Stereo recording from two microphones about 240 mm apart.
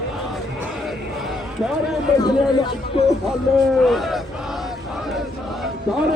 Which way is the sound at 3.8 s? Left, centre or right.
Centre.